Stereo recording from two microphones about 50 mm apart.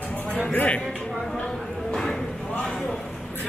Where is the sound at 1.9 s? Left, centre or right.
Centre.